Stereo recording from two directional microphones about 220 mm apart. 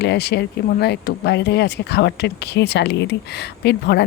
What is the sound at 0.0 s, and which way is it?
Speech, 50° left (ahead or behind).